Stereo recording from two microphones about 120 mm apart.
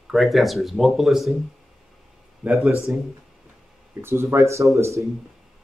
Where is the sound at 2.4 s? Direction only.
5° right (ahead or behind); by 5.1 s 25° right (ahead or behind).